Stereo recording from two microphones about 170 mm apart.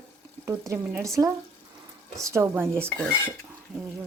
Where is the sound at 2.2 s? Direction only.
15° right (ahead or behind).